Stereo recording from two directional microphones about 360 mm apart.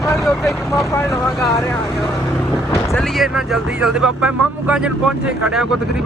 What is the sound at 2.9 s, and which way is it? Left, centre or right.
Speech, centre.